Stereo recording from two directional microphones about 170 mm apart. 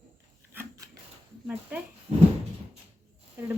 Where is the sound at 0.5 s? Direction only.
15° right (ahead or behind).